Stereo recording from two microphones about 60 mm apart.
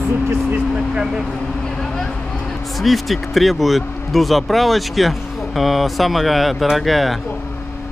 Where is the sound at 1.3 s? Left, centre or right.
Centre.